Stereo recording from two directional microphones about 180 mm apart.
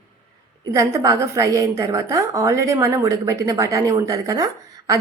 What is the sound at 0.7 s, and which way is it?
A woman's voice, 20° right (ahead or behind).